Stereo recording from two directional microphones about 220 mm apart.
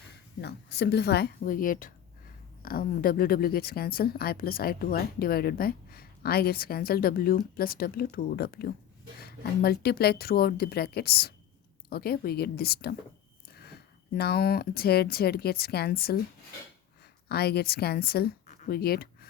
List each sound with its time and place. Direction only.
0.4 s speech: 50° left (ahead or behind)
17.2 s speech: 45° left (ahead or behind)